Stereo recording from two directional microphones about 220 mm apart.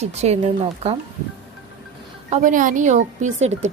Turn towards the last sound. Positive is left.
turn(degrees=-30)  # may be behind; listen again after turning